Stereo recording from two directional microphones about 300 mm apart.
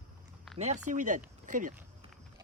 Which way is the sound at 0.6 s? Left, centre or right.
Right.